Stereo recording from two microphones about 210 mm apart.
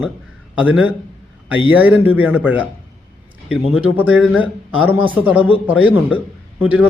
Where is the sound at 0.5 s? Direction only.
5° right (ahead or behind).